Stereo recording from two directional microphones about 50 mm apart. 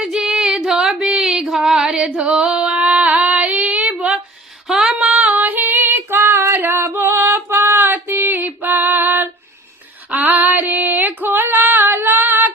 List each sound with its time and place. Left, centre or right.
0.0 s female singing: centre
4.7 s female singing: centre
4.9 s female singing: right
7.6 s female singing: right